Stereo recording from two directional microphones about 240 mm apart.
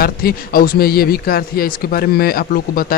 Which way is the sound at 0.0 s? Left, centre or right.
Left.